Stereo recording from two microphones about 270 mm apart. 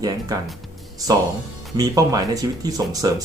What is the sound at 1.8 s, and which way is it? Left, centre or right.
Speech, centre.